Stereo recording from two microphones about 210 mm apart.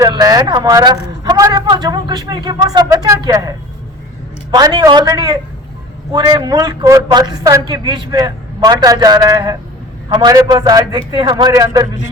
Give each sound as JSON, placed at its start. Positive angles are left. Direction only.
{"t": 0.0, "sound": "a man's voice", "side_deg": -20}
{"t": 4.5, "sound": "a man's voice", "side_deg": -20}